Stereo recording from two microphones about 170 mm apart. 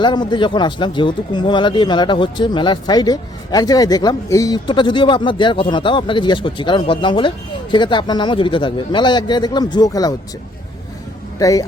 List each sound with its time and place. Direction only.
0.0 s speech: 25° left (ahead or behind)
11.3 s speech: 20° left (ahead or behind)